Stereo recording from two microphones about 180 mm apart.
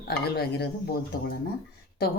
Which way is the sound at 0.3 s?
65° left (ahead or behind).